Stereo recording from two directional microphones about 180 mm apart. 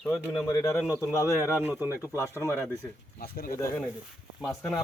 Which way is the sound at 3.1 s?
55° left (ahead or behind).